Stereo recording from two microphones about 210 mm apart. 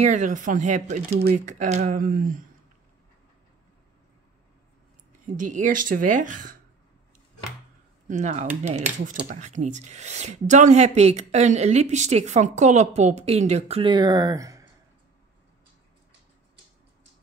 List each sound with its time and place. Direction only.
0.0 s speech: 35° right (ahead or behind)
5.2 s speech: 40° right (ahead or behind)
8.1 s speech: 35° right (ahead or behind); by 14.7 s 15° right (ahead or behind)